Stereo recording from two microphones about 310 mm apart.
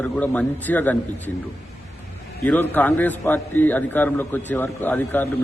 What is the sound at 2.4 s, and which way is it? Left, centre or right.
A man's voice, centre.